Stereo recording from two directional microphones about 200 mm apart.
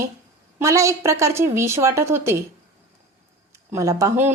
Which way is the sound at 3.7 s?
15° right (ahead or behind).